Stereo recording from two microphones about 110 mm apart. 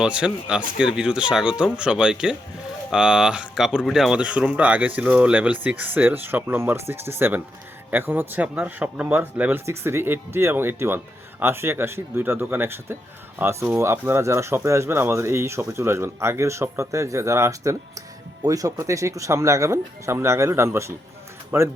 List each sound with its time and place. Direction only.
0.0 s speech: 10° right (ahead or behind)